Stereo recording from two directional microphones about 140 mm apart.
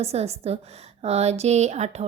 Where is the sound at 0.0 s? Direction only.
50° right (ahead or behind).